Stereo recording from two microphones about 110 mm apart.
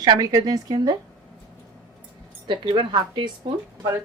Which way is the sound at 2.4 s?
50° right (ahead or behind).